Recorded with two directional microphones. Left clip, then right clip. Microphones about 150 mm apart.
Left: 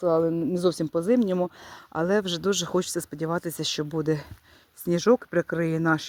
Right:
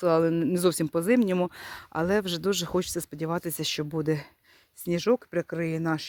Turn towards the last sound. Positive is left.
turn(degrees=25)  # may be behind; listen again after turning